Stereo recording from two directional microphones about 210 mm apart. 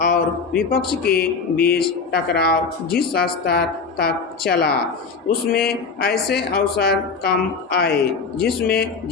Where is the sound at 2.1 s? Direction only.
50° left (ahead or behind).